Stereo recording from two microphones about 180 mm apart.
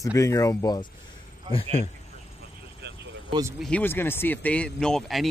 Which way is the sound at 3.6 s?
10° left (ahead or behind).